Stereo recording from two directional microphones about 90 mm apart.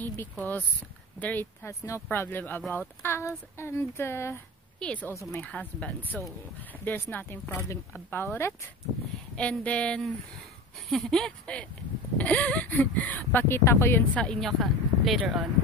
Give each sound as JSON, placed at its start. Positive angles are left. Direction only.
{"t": 0.0, "sound": "speech", "side_deg": 20}
{"t": 1.7, "sound": "speech", "side_deg": 35}
{"t": 2.0, "sound": "speech", "side_deg": 20}
{"t": 4.7, "sound": "speech", "side_deg": 10}
{"t": 5.1, "sound": "speech", "side_deg": 35}
{"t": 5.4, "sound": "speech", "side_deg": 15}
{"t": 9.4, "sound": "speech", "side_deg": 15}
{"t": 14.1, "sound": "speech", "side_deg": 10}
{"t": 14.4, "sound": "speech", "side_deg": 0}